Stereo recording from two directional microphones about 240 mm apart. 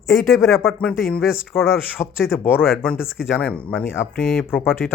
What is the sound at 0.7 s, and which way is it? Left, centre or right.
A woman's voice, centre.